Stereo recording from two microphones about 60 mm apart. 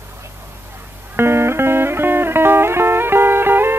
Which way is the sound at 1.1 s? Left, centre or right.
Right.